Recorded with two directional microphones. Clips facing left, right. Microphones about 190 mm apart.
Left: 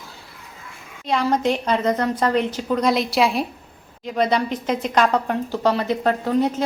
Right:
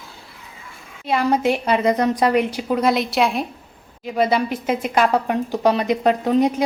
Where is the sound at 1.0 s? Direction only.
5° right (ahead or behind).